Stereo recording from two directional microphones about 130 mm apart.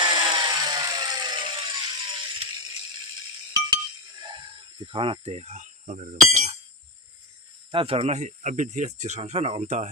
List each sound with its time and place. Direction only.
0.0 s a sound: 35° right (ahead or behind)
3.5 s chink: 30° right (ahead or behind); by 6.6 s 65° right (ahead or behind)
7.7 s speech: 45° right (ahead or behind); by 9.9 s 65° right (ahead or behind)